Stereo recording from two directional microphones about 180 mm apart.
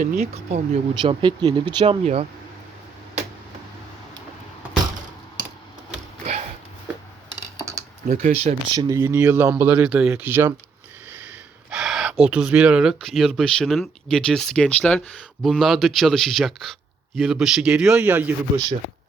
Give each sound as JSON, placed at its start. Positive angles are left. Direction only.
{"t": 0.0, "sound": "speech", "side_deg": -40}
{"t": 1.0, "sound": "speech", "side_deg": -25}
{"t": 1.8, "sound": "speech", "side_deg": -35}
{"t": 7.5, "sound": "typing", "side_deg": -15}
{"t": 8.0, "sound": "speech", "side_deg": -40}
{"t": 8.7, "sound": "a man's voice", "side_deg": -20}